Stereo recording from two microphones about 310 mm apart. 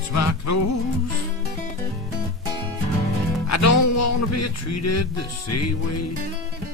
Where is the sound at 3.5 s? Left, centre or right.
Left.